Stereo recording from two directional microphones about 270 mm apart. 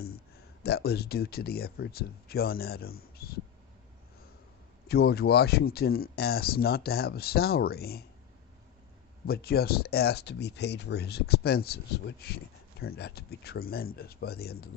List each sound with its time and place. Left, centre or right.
0.6 s speech: left
4.9 s speech: left
9.2 s speech: left